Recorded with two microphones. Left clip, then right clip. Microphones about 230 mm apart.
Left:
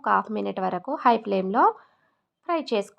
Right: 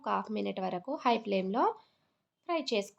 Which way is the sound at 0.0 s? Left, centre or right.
Centre.